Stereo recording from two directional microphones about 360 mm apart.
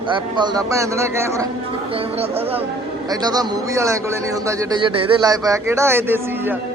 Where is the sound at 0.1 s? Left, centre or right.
Centre.